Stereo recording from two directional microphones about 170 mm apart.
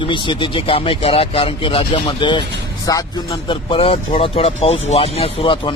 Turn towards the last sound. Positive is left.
turn(degrees=30)  # may be behind; listen again after turning